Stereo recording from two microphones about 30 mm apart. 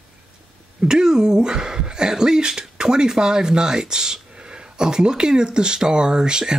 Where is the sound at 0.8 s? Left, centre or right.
Right.